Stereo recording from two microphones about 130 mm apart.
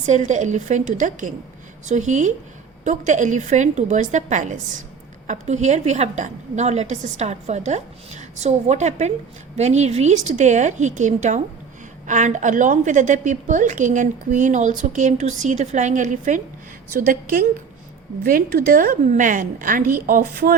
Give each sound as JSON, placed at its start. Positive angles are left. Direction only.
{"t": 0.0, "sound": "a woman's voice", "side_deg": -65}
{"t": 1.9, "sound": "a woman's voice", "side_deg": -65}
{"t": 16.9, "sound": "a woman's voice", "side_deg": -90}